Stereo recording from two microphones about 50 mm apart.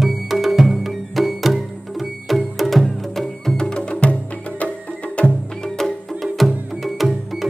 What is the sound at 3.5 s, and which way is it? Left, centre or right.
Music, centre.